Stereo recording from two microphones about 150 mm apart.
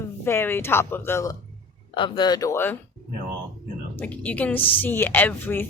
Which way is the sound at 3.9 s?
10° left (ahead or behind).